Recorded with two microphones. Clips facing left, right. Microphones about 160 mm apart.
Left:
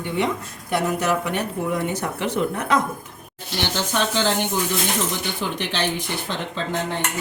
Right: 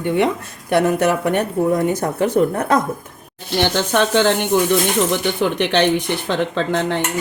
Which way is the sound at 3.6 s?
60° right (ahead or behind).